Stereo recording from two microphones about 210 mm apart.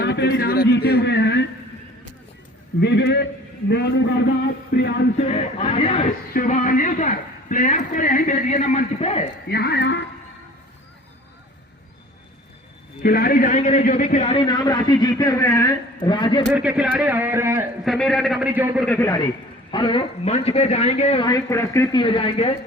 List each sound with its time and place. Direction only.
0.0 s speech: 55° left (ahead or behind)
2.8 s a man's voice: 55° left (ahead or behind)
5.1 s a man's voice: 30° left (ahead or behind)
6.3 s a man's voice: 40° left (ahead or behind)
9.5 s speech: 50° left (ahead or behind)
13.0 s a man's voice: 45° left (ahead or behind); by 16.5 s 25° left (ahead or behind)
16.5 s speech: 5° right (ahead or behind)
17.8 s a man's voice: centre (ahead or behind)
18.9 s speech: 10° left (ahead or behind)
19.7 s a man's voice: 25° left (ahead or behind)
21.2 s speech: 15° left (ahead or behind)
22.0 s a man's voice: 25° left (ahead or behind)